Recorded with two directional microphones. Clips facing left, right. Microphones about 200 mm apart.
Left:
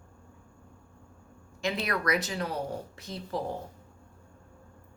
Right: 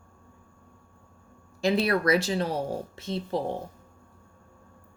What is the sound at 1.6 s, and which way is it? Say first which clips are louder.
Speech: right 7 dB; 35° right (ahead or behind).